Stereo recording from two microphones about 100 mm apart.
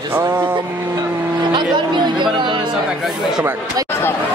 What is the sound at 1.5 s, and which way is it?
Speech, 50° right (ahead or behind).